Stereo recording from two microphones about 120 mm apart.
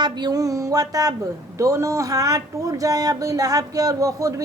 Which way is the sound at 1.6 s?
30° right (ahead or behind).